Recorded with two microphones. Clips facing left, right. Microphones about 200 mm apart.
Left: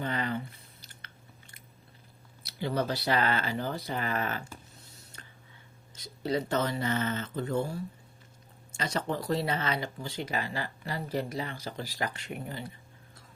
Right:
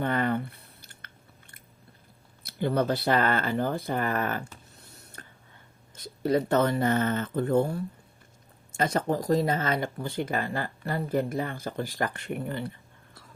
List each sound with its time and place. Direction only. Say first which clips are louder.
0.0 s chewing: right 6 dB; 55° right (ahead or behind)
2.4 s speech: right 5 dB; 50° right (ahead or behind)